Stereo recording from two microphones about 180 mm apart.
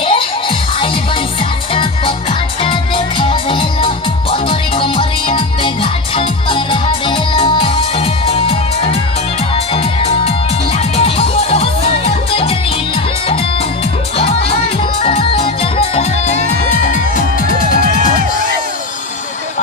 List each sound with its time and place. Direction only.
0.0 s music: 30° left (ahead or behind)
11.1 s music: 30° left (ahead or behind)
14.1 s music: 30° left (ahead or behind)
17.5 s music: 50° left (ahead or behind)